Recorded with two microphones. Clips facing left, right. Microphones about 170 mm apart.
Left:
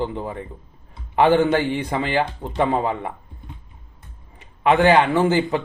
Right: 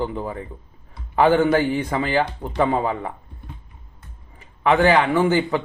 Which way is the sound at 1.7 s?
25° left (ahead or behind).